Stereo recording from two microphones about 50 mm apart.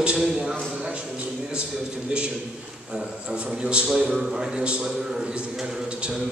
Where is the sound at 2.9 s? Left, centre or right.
Centre.